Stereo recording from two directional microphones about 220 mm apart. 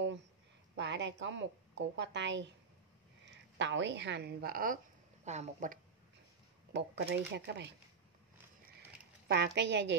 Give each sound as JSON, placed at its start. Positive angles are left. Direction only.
{"t": 0.7, "sound": "a woman's voice", "side_deg": -55}
{"t": 5.2, "sound": "speech", "side_deg": -30}
{"t": 6.7, "sound": "a woman's voice", "side_deg": -50}
{"t": 9.3, "sound": "a woman's voice", "side_deg": -50}